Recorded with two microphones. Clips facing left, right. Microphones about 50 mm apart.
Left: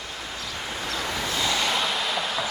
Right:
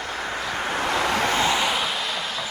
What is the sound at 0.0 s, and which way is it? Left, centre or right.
Vehicle, right.